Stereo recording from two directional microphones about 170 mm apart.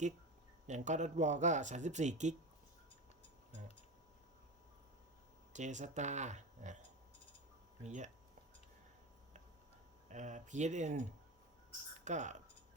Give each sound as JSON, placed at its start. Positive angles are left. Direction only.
{"t": 0.7, "sound": "speech", "side_deg": -45}
{"t": 5.5, "sound": "speech", "side_deg": -45}
{"t": 7.9, "sound": "speech", "side_deg": -45}
{"t": 10.1, "sound": "speech", "side_deg": -45}
{"t": 12.0, "sound": "speech", "side_deg": -45}